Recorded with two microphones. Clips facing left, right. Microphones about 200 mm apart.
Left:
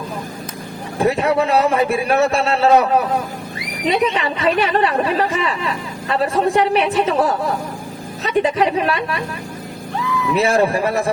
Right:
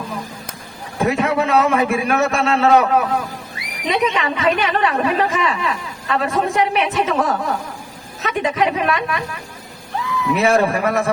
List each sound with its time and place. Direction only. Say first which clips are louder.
0.9 s a woman's voice: left 2 dB; 35° left (ahead or behind)
10.3 s a woman's voice: even; 35° left (ahead or behind)